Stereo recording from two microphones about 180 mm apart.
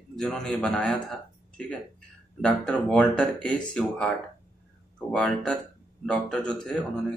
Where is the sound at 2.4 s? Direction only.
5° left (ahead or behind).